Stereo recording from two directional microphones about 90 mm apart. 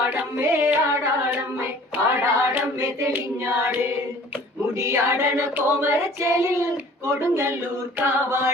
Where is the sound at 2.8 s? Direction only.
30° right (ahead or behind).